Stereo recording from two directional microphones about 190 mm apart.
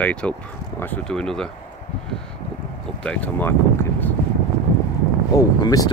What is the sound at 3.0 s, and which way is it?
Speech, 5° left (ahead or behind).